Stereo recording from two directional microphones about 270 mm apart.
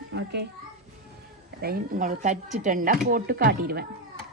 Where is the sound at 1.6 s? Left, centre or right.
Right.